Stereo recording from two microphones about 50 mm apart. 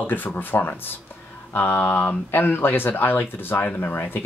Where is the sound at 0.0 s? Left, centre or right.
Left.